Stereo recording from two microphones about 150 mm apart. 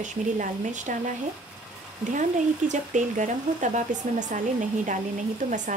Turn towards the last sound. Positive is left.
turn(degrees=-55)  # may be behind; listen again after turning